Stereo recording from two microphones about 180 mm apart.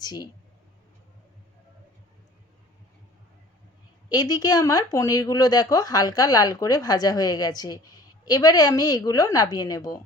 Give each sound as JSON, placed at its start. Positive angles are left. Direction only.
{"t": 0.0, "sound": "speech", "side_deg": 20}
{"t": 4.1, "sound": "speech", "side_deg": 20}